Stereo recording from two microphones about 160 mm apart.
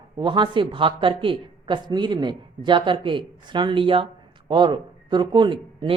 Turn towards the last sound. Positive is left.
turn(degrees=-30)  # may be behind; listen again after turning